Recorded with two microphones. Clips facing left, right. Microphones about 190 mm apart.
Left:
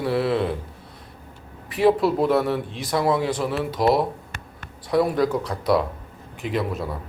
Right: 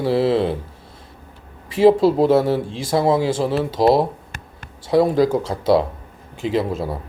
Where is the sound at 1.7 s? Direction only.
25° right (ahead or behind).